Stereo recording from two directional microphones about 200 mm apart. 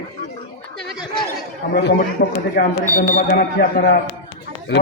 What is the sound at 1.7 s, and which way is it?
Speech, 55° left (ahead or behind).